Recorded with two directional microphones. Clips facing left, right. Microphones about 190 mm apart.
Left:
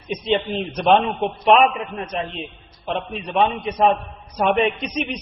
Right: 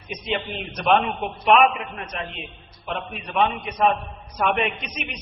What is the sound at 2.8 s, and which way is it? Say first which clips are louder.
A man's voice: left 5 dB; 30° left (ahead or behind).